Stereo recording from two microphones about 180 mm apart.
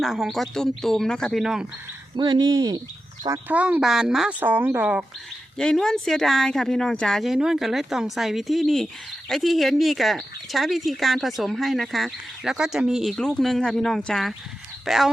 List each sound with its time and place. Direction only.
0.0 s speech: centre (ahead or behind)
2.1 s speech: 25° right (ahead or behind); by 5.0 s 10° right (ahead or behind)
5.5 s speech: 5° left (ahead or behind)